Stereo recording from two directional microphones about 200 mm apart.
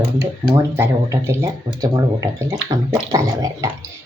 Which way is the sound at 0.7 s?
10° right (ahead or behind).